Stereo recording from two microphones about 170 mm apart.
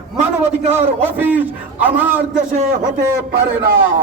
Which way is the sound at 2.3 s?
40° right (ahead or behind).